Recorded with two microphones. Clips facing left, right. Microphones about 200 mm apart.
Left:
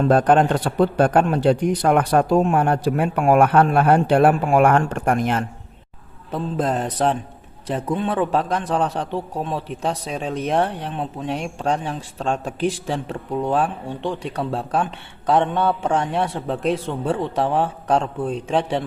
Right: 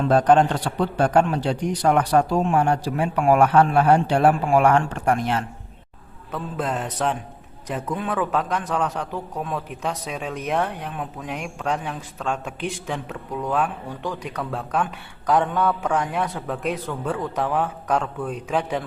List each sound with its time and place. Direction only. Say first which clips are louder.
0.0 s speech: left 1 dB; 50° left (ahead or behind)
6.3 s mantra: left 4 dB; 35° left (ahead or behind)
7.7 s a man's voice: left 4 dB; 30° left (ahead or behind)